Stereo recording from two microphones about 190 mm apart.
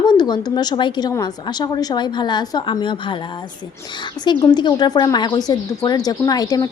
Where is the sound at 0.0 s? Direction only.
20° left (ahead or behind).